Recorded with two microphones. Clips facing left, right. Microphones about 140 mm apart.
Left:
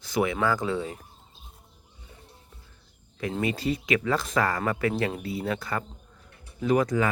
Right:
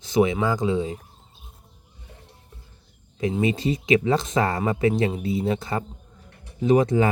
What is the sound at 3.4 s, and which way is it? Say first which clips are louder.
Speech: right 2 dB; 25° right (ahead or behind).